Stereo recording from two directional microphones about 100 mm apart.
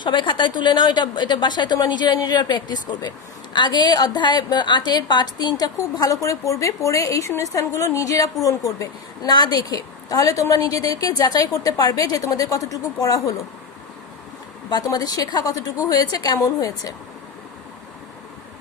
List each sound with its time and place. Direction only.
0.0 s a woman's voice: 55° left (ahead or behind); by 13.3 s 35° left (ahead or behind)
14.7 s a woman's voice: 40° left (ahead or behind)